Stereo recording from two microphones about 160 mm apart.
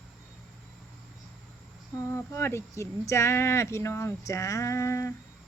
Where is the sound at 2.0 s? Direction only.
15° left (ahead or behind).